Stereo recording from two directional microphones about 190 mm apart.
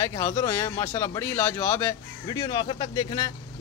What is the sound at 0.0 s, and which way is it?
Speech, 15° left (ahead or behind).